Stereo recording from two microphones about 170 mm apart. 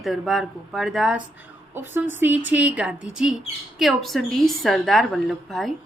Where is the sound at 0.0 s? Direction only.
Centre (ahead or behind).